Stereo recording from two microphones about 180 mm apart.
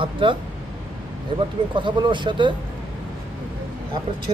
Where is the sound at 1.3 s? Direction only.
35° right (ahead or behind).